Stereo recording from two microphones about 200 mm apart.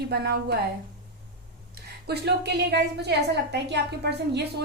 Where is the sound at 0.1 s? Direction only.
55° right (ahead or behind).